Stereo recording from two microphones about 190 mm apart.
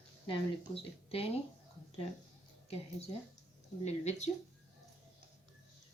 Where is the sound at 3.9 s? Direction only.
35° left (ahead or behind).